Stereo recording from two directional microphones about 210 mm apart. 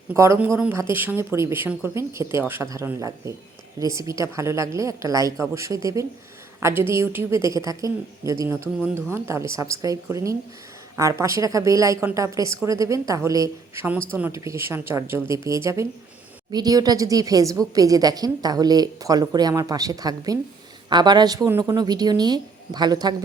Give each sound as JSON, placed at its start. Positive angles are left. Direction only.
{"t": 0.1, "sound": "a woman's voice", "side_deg": -10}